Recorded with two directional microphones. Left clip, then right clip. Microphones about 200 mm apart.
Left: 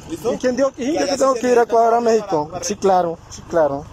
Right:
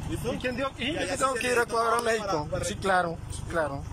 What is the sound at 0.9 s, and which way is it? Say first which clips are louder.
Speech: left 11 dB; 20° left (ahead or behind).